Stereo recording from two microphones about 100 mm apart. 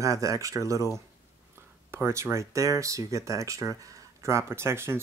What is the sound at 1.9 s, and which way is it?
Speech, 25° right (ahead or behind).